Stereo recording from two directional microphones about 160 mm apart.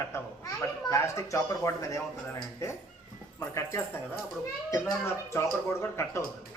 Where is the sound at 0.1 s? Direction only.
15° left (ahead or behind).